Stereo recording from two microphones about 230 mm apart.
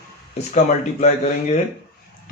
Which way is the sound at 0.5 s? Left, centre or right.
Left.